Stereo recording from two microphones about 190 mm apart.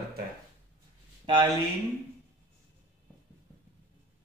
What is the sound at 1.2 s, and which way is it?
Speech, 25° right (ahead or behind).